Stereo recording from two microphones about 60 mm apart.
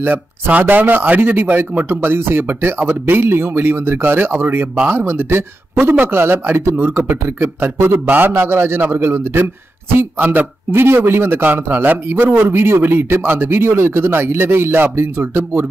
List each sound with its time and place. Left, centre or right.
0.0 s speech: right